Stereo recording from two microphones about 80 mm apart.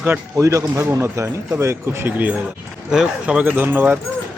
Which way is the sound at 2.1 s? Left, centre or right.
Right.